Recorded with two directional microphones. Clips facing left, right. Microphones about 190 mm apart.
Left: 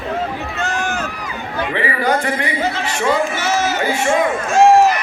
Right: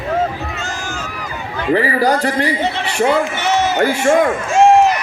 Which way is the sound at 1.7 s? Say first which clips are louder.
Right 5 dB; 35° right (ahead or behind).